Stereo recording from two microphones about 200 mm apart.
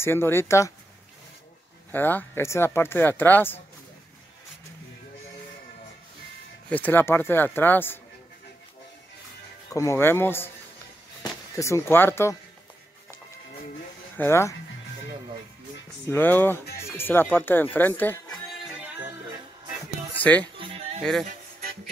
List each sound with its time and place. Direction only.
0.0 s speech: 10° left (ahead or behind)
1.9 s speech: 10° left (ahead or behind)
6.7 s speech: 10° left (ahead or behind)
9.7 s speech: 15° left (ahead or behind)
11.5 s speech: 15° left (ahead or behind)
14.1 s speech: 10° left (ahead or behind)
16.1 s speech: 10° left (ahead or behind)
16.7 s music: 10° left (ahead or behind)
18.8 s music: 10° right (ahead or behind)
20.2 s speech: 5° left (ahead or behind)
20.5 s music: 25° right (ahead or behind)
21.0 s speech: centre (ahead or behind)
21.3 s music: 40° right (ahead or behind)